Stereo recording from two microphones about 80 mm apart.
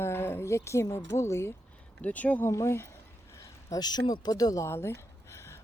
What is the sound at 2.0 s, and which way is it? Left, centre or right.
Speech, centre.